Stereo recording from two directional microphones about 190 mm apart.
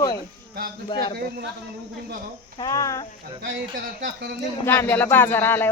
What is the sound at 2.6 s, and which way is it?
Speech, 15° left (ahead or behind).